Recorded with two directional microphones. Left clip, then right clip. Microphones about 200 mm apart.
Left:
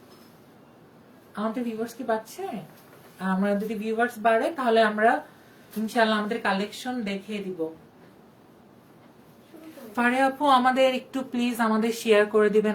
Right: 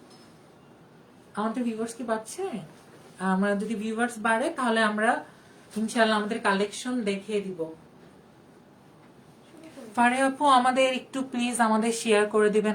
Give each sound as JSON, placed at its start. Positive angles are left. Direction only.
{"t": 1.4, "sound": "speech", "side_deg": -20}
{"t": 9.9, "sound": "a woman's voice", "side_deg": -15}